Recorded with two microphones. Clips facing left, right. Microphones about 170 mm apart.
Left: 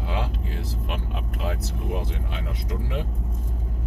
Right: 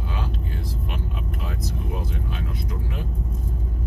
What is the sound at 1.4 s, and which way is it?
Speech, 75° left (ahead or behind).